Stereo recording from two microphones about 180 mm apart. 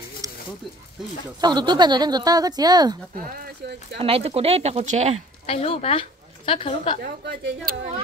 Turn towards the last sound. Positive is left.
turn(degrees=-60)  # may be behind; listen again after turning